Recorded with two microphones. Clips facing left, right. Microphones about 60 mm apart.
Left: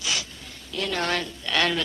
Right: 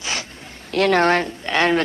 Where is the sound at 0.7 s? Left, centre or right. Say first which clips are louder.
Right 12 dB; right.